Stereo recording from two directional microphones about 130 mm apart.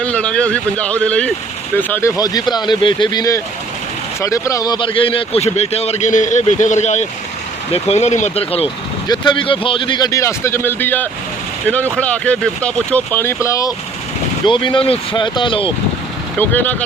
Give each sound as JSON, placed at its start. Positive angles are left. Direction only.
{"t": 0.0, "sound": "speech", "side_deg": 10}
{"t": 9.0, "sound": "speech", "side_deg": 35}
{"t": 10.1, "sound": "speech", "side_deg": 25}
{"t": 14.4, "sound": "speech", "side_deg": 40}
{"t": 16.4, "sound": "speech", "side_deg": 15}